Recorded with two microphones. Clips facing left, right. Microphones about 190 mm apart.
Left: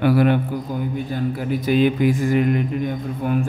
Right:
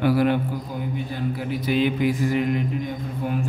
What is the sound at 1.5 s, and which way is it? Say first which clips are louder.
Mantra: left 5 dB; 45° left (ahead or behind).